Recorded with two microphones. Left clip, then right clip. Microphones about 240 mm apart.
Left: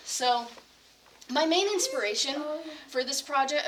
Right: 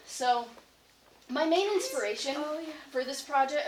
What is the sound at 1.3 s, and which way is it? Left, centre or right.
Speech, left.